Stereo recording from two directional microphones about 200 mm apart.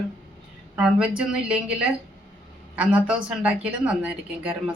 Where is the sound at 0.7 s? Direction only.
5° right (ahead or behind).